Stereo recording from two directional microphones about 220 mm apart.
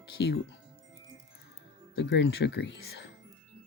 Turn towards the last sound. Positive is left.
turn(degrees=55)  # may be behind; listen again after turning